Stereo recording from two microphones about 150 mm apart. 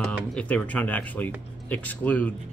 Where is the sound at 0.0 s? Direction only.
5° left (ahead or behind).